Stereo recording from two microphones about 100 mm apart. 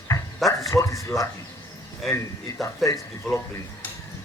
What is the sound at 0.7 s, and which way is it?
Speech, 30° left (ahead or behind).